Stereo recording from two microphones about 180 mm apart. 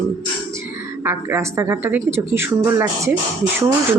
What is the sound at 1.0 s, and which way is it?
A woman's voice, 15° right (ahead or behind).